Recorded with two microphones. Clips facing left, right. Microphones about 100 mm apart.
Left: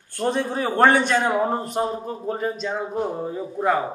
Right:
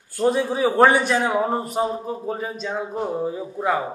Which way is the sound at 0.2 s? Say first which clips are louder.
Right 4 dB; 5° right (ahead or behind).